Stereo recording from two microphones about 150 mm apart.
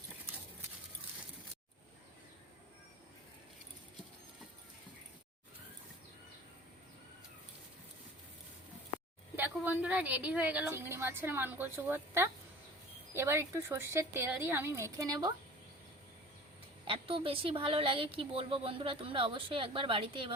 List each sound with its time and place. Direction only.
9.3 s a woman's voice: 15° right (ahead or behind)
16.8 s a woman's voice: 35° right (ahead or behind)